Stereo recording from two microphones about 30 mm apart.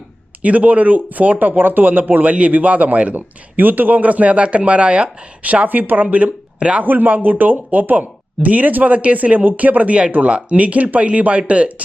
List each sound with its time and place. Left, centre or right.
0.4 s speech: right
2.5 s a man's voice: right
3.2 s a man's voice: right
5.6 s speech: right
6.6 s speech: right
6.8 s speech: right
9.4 s speech: right
10.2 s speech: right